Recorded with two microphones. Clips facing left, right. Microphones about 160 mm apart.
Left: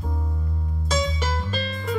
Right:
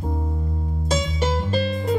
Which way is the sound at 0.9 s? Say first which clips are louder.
Right 3 dB; 25° right (ahead or behind).